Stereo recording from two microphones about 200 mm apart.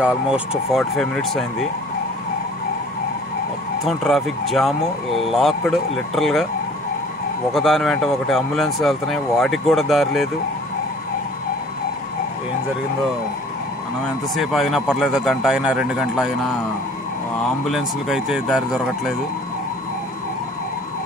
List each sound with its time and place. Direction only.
0.0 s speech: 5° right (ahead or behind)
3.8 s speech: centre (ahead or behind)
7.5 s speech: centre (ahead or behind)
14.3 s speech: centre (ahead or behind)
17.6 s speech: centre (ahead or behind)